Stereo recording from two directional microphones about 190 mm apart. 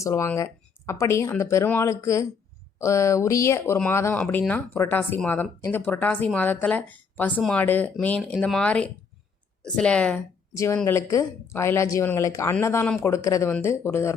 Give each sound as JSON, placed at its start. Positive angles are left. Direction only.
{"t": 0.0, "sound": "speech", "side_deg": 15}
{"t": 10.5, "sound": "speech", "side_deg": 15}